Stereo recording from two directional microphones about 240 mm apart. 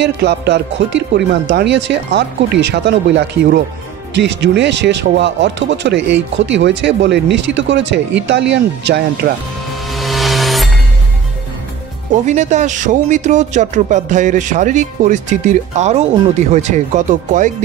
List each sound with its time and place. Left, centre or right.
0.0 s speech: right
9.8 s music: centre
12.3 s speech: right